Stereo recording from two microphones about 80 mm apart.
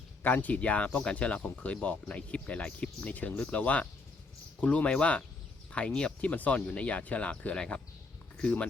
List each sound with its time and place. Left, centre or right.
0.2 s speech: left